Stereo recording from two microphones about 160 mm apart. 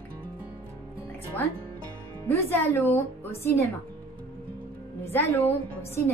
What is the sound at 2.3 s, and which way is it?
A woman's voice, 15° left (ahead or behind).